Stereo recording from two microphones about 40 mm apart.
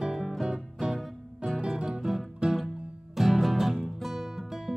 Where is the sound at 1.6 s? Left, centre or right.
Centre.